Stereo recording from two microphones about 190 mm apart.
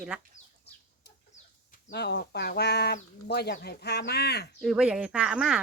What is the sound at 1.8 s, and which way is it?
Speech, 60° left (ahead or behind).